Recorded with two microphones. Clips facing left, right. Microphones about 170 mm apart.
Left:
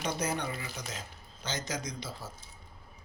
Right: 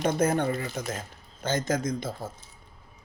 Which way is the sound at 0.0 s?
50° right (ahead or behind).